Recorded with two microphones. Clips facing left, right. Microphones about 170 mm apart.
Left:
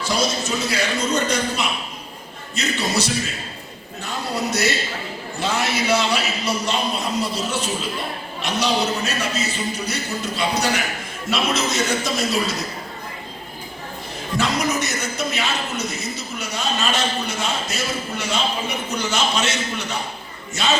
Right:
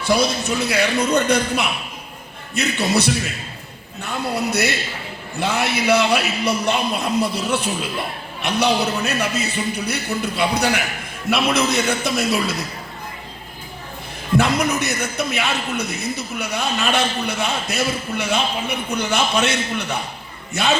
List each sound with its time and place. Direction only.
0.0 s a man's voice: 60° right (ahead or behind)
14.3 s a man's voice: 60° right (ahead or behind)